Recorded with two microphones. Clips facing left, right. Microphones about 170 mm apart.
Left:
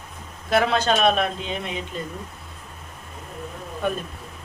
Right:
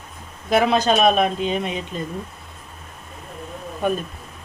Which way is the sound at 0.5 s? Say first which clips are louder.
Right 3 dB; 15° right (ahead or behind).